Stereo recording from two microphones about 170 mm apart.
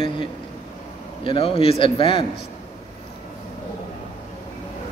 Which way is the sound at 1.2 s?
35° left (ahead or behind).